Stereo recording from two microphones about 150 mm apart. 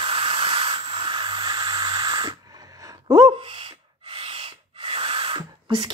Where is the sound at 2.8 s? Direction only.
25° right (ahead or behind).